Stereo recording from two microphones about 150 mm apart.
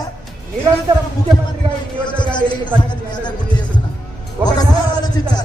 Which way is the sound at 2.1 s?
30° left (ahead or behind).